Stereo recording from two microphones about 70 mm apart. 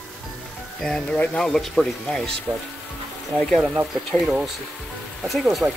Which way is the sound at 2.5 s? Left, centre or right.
Right.